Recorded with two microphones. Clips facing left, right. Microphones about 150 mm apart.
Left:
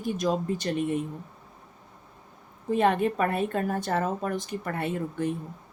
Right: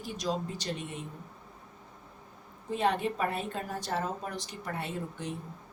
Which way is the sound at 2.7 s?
55° left (ahead or behind).